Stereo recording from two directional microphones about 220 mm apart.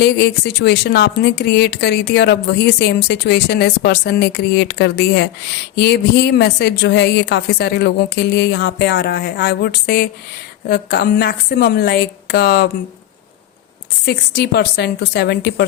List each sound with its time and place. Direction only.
0.0 s speech: 50° left (ahead or behind)
14.0 s speech: 45° left (ahead or behind)